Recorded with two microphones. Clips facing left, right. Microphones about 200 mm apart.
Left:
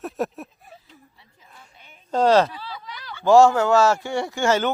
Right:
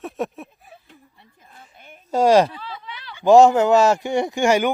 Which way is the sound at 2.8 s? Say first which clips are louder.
Even; 40° left (ahead or behind).